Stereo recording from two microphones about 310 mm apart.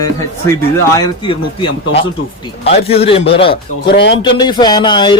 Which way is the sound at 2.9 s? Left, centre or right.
Centre.